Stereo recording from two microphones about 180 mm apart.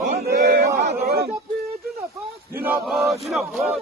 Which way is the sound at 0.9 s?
60° right (ahead or behind).